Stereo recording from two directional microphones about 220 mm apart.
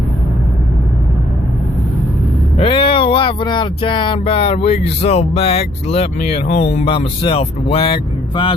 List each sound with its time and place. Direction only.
2.6 s speech: 25° left (ahead or behind)